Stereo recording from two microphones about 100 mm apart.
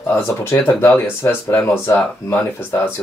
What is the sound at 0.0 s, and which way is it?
Speech, 25° left (ahead or behind).